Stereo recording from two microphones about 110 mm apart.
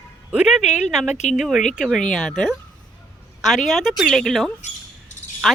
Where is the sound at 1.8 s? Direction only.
Centre (ahead or behind).